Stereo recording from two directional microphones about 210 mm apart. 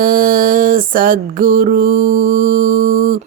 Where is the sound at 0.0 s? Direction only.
40° right (ahead or behind).